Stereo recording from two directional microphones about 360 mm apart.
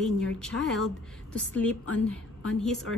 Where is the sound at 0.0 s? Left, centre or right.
Centre.